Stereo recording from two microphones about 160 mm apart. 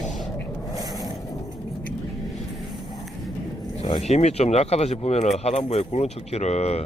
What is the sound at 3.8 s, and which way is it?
Speech, 40° left (ahead or behind).